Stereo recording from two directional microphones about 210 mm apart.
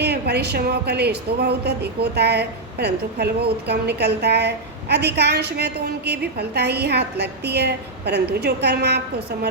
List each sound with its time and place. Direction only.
0.0 s a woman's voice: 50° right (ahead or behind)